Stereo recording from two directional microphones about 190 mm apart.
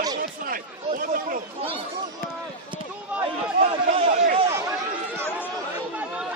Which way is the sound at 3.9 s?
35° right (ahead or behind).